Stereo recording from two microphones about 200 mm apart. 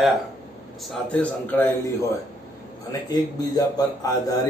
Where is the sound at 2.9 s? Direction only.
20° left (ahead or behind).